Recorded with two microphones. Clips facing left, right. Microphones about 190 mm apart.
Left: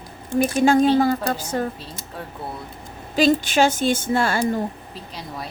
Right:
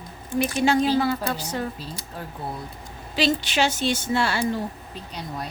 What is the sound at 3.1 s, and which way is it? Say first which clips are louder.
A woman's voice: left 5 dB; 50° left (ahead or behind).